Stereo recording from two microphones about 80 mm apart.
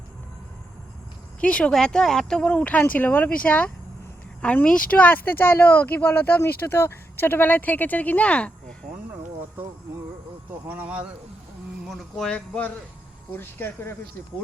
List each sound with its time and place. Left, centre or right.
1.4 s speech: centre
10.7 s speech: centre
11.9 s speech: centre
13.3 s speech: left